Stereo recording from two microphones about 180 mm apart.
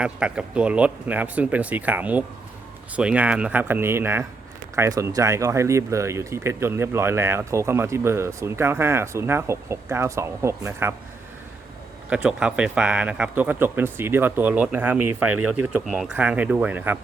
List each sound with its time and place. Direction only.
0.0 s speech: 5° right (ahead or behind)
12.1 s speech: 5° right (ahead or behind)